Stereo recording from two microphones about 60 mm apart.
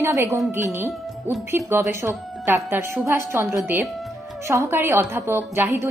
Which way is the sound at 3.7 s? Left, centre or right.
Right.